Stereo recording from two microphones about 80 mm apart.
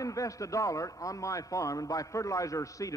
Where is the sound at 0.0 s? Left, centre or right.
Left.